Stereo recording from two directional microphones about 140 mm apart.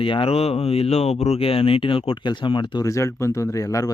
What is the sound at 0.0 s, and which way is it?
Speech, 40° left (ahead or behind).